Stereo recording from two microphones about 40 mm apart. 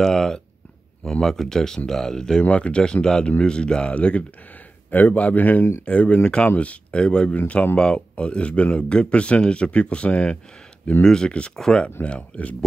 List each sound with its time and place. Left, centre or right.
0.0 s speech: centre
2.5 s speech: left
4.9 s a man's voice: left
5.9 s speech: left
7.3 s speech: left
7.7 s speech: left
11.1 s speech: centre
12.2 s speech: left